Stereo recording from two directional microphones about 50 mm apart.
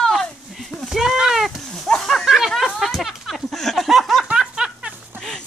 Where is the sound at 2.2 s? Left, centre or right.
Centre.